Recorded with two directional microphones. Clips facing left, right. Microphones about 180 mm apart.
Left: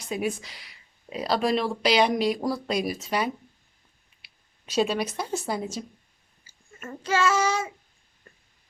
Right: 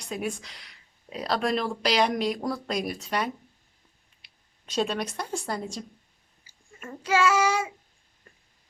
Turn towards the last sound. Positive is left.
turn(degrees=-10)  # may be behind; listen again after turning